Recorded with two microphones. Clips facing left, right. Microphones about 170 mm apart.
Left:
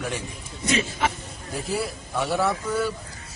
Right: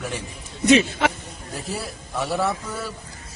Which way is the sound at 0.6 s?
70° right (ahead or behind).